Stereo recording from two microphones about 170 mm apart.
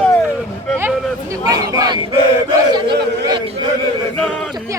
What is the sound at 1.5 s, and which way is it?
Speech, 20° right (ahead or behind).